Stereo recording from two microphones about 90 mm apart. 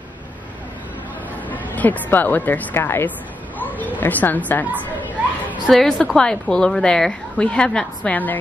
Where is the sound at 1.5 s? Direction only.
20° left (ahead or behind).